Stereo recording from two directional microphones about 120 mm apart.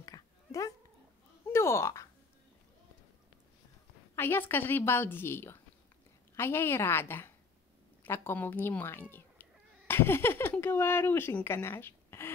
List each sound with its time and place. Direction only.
0.0 s dog: 30° left (ahead or behind)
1.5 s a sound: 20° left (ahead or behind)
4.1 s speech: 20° left (ahead or behind)